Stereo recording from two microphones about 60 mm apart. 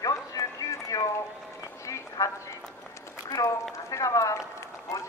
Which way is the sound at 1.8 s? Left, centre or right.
Left.